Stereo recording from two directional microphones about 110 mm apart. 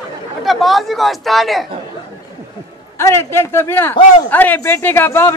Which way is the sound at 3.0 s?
25° left (ahead or behind).